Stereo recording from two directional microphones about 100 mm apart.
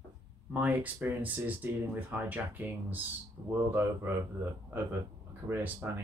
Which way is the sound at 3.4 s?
40° right (ahead or behind).